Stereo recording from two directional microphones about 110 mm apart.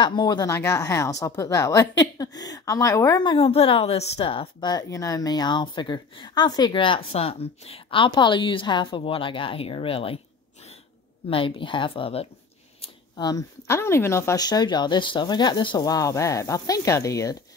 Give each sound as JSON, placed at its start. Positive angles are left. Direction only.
{"t": 0.0, "sound": "speech", "side_deg": 40}
{"t": 0.5, "sound": "a woman's voice", "side_deg": 25}
{"t": 3.4, "sound": "a woman's voice", "side_deg": 60}
{"t": 11.2, "sound": "speech", "side_deg": 55}
{"t": 13.1, "sound": "a woman's voice", "side_deg": 35}
{"t": 14.3, "sound": "speech", "side_deg": 35}